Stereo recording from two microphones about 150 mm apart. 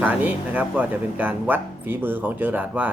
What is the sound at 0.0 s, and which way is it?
Speech, 10° right (ahead or behind).